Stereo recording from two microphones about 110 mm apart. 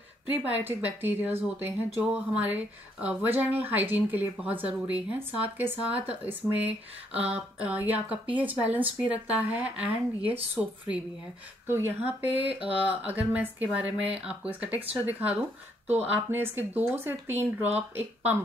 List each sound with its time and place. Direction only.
0.3 s speech: 15° right (ahead or behind)
12.4 s speech: 60° right (ahead or behind)
13.0 s speech: 15° right (ahead or behind)